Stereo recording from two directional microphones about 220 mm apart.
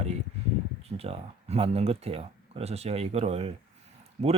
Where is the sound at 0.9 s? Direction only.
25° right (ahead or behind).